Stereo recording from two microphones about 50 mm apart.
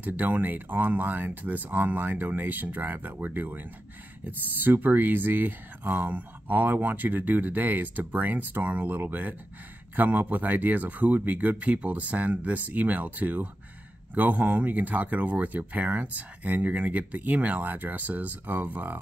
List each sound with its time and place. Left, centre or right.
0.0 s speech: right